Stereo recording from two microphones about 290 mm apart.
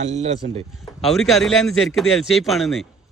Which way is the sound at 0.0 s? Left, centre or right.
Right.